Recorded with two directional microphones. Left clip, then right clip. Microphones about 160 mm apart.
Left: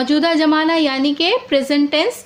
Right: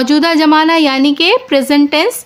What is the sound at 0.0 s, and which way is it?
A woman's voice, 45° right (ahead or behind).